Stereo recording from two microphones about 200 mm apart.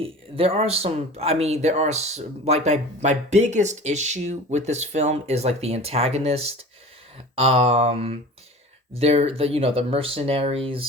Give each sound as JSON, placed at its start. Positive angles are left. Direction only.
{"t": 0.0, "sound": "speech", "side_deg": -30}